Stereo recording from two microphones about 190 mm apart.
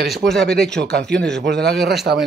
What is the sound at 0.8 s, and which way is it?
Speech, 60° right (ahead or behind).